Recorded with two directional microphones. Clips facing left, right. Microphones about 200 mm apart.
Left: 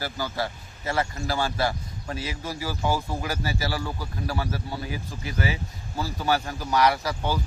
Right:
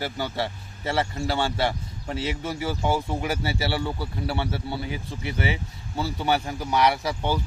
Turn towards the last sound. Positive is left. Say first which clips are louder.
# even
turn(degrees=-20)  # may be behind; listen again after turning